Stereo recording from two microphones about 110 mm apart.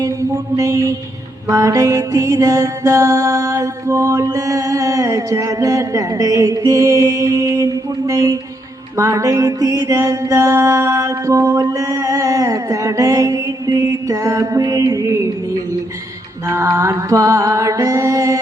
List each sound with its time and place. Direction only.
0.5 s mantra: 30° right (ahead or behind)
1.5 s music: 30° right (ahead or behind)
6.7 s mantra: 30° right (ahead or behind)
16.6 s music: 30° right (ahead or behind)